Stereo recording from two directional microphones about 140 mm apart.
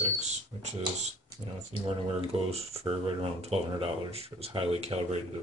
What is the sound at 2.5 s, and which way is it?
Speech, 45° right (ahead or behind).